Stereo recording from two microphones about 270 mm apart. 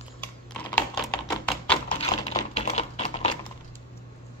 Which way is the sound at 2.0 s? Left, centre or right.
Left.